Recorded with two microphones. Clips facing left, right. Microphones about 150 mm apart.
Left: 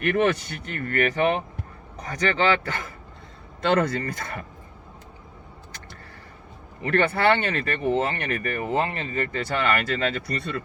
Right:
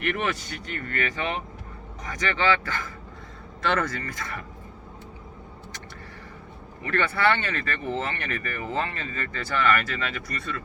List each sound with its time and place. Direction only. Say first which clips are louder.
0.7 s speech: left 6 dB; 45° left (ahead or behind)
6.8 s speech: left 3 dB; 30° left (ahead or behind)